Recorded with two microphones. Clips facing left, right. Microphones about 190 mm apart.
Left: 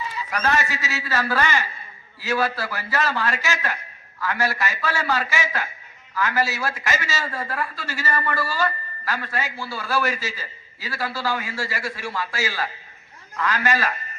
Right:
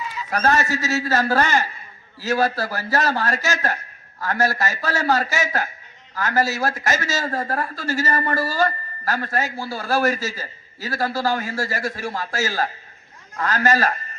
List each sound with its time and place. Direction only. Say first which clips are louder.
0.3 s a man's voice: right 4 dB; 40° right (ahead or behind)